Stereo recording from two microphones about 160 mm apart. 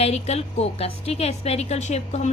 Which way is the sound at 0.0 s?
40° left (ahead or behind).